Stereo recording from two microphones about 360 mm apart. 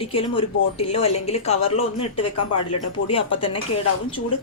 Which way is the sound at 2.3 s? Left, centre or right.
Left.